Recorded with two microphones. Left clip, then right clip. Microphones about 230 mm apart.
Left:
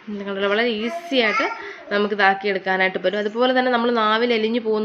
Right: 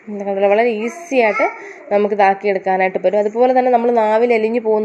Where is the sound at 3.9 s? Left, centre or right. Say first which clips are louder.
Right 5 dB; left.